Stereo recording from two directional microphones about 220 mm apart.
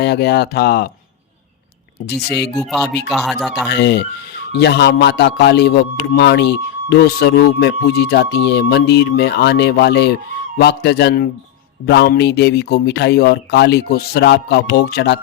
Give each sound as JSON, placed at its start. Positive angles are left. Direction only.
{"t": 0.0, "sound": "a man's voice", "side_deg": 50}
{"t": 2.0, "sound": "a man's voice", "side_deg": 50}
{"t": 2.6, "sound": "speech", "side_deg": 0}
{"t": 3.7, "sound": "a man's voice", "side_deg": 50}